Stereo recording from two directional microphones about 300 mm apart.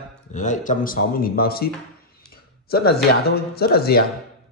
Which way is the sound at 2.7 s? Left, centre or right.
Left.